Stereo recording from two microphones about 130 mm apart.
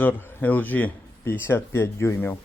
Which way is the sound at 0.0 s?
15° left (ahead or behind).